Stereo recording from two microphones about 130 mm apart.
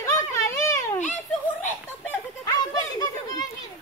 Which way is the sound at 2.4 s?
30° left (ahead or behind).